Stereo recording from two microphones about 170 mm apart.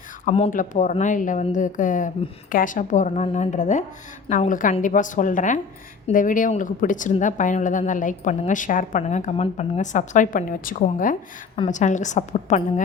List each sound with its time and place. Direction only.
0.3 s speech: 35° left (ahead or behind)
0.5 s a woman's voice: 50° left (ahead or behind)